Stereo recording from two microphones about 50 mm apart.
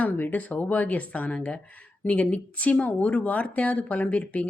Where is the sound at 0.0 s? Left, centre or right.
Left.